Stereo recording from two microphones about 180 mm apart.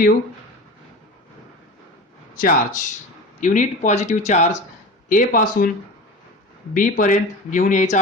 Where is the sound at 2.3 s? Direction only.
50° left (ahead or behind).